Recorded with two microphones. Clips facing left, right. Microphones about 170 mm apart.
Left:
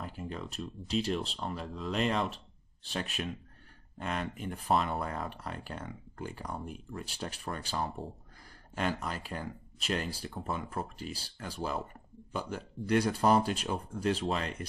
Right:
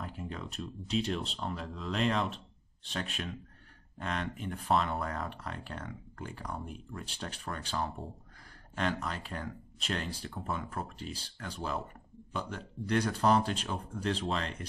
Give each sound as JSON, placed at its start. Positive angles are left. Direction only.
{"t": 0.0, "sound": "speech", "side_deg": 0}